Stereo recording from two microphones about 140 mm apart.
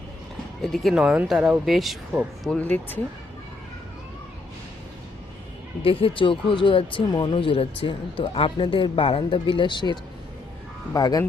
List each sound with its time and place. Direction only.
0.6 s speech: centre (ahead or behind)
5.8 s speech: 40° left (ahead or behind)